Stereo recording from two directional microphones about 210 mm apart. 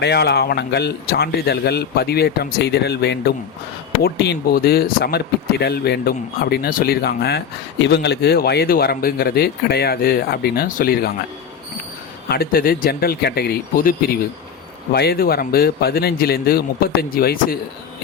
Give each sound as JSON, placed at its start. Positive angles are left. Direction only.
{"t": 0.0, "sound": "speech", "side_deg": 50}
{"t": 12.3, "sound": "speech", "side_deg": 45}